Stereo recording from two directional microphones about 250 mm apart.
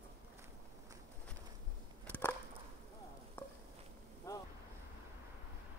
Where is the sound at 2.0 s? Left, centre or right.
Centre.